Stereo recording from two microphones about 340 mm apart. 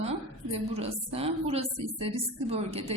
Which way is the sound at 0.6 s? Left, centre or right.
Centre.